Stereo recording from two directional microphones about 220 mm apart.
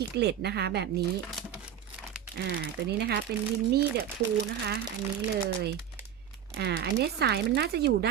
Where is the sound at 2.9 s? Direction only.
45° right (ahead or behind).